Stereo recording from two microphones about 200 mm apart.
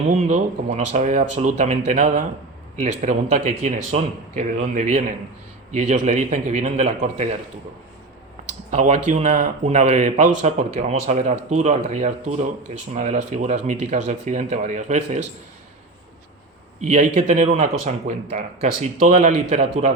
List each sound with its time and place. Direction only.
0.3 s speech: 35° right (ahead or behind)
8.7 s speech: 35° right (ahead or behind)
16.8 s speech: 35° right (ahead or behind)